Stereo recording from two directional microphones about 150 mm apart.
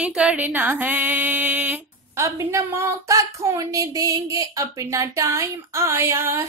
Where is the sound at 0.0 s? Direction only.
5° right (ahead or behind).